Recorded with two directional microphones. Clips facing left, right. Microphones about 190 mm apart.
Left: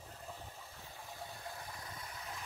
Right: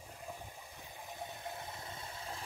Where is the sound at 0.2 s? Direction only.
15° right (ahead or behind).